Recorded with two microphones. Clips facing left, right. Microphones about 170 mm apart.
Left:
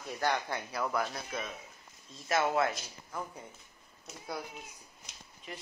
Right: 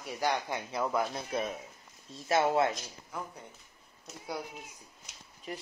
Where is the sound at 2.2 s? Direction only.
30° right (ahead or behind).